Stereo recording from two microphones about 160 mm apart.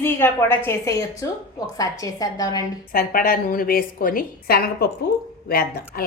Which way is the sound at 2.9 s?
65° left (ahead or behind).